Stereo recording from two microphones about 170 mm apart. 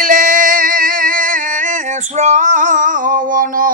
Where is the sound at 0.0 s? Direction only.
50° right (ahead or behind).